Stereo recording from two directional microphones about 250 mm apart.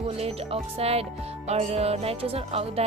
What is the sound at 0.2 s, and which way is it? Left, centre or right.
A woman's voice, right.